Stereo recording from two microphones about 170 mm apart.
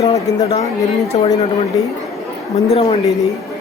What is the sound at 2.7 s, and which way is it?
Speech, 35° left (ahead or behind).